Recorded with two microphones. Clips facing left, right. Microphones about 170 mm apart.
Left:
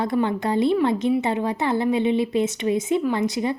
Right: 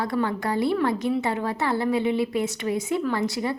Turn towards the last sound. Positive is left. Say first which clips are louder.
# left 3 dB
turn(degrees=20)  # may be behind; listen again after turning